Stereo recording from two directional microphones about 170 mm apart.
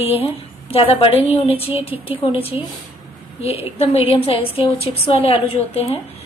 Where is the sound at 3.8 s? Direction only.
35° left (ahead or behind).